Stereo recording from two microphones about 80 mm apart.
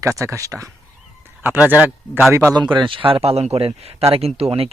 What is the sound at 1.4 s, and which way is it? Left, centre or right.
Speech, right.